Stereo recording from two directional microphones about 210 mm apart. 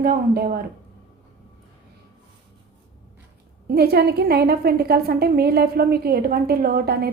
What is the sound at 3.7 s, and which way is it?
A woman's voice, 50° right (ahead or behind).